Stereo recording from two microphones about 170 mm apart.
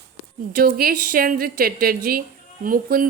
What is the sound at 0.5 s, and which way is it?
A woman's voice, 60° right (ahead or behind).